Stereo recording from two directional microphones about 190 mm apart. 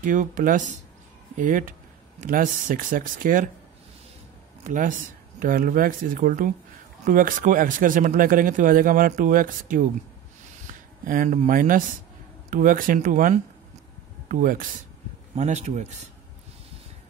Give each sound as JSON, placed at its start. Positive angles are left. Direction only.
{"t": 0.0, "sound": "speech", "side_deg": -45}
{"t": 4.6, "sound": "speech", "side_deg": -40}
{"t": 11.1, "sound": "speech", "side_deg": -40}